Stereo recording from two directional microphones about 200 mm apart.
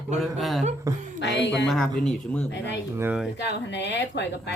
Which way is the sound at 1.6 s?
Centre (ahead or behind).